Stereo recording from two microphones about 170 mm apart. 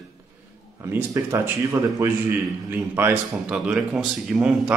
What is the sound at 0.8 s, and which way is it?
A man's voice, 15° right (ahead or behind).